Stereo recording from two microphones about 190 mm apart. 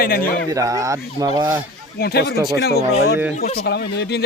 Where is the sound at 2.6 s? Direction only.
60° left (ahead or behind).